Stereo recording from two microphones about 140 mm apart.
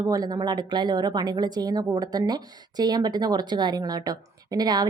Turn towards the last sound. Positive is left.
turn(degrees=-30)  # may be behind; listen again after turning